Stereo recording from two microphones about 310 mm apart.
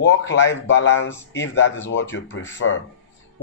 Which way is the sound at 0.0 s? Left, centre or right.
Left.